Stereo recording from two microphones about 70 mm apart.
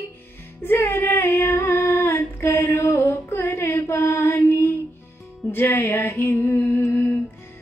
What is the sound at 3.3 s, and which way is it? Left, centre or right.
Mantra, left.